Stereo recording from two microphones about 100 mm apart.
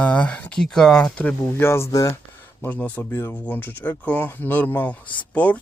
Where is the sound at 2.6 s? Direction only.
15° left (ahead or behind).